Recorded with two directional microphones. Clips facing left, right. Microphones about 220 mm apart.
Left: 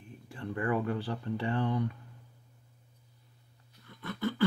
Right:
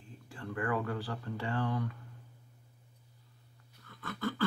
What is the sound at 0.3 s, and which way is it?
Speech, 20° left (ahead or behind).